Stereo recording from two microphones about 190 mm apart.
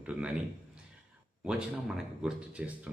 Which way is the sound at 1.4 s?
5° right (ahead or behind).